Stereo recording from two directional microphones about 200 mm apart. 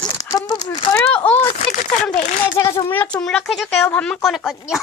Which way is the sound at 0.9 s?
10° left (ahead or behind).